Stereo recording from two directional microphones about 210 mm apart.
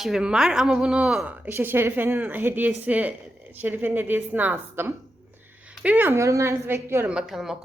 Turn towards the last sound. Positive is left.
turn(degrees=0)  # may be behind; listen again after turning